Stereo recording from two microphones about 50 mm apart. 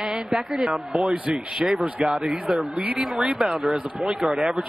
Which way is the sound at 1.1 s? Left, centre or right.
Right.